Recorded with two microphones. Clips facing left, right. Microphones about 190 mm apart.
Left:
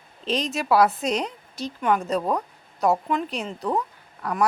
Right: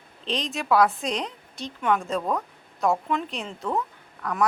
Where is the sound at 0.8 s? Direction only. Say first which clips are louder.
Left 2 dB; 40° left (ahead or behind).